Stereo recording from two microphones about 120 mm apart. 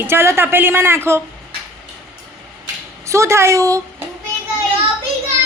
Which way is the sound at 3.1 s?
25° right (ahead or behind).